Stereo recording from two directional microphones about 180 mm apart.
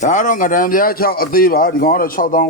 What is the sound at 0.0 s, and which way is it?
A man's voice, 45° left (ahead or behind).